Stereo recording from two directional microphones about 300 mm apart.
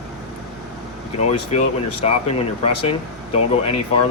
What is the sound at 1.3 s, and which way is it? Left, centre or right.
Speech, left.